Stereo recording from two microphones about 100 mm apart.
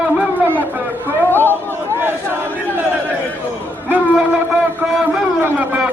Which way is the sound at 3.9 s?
15° right (ahead or behind).